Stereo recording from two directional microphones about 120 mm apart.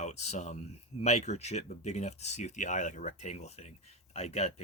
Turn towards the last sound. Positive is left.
turn(degrees=65)  # may be behind; listen again after turning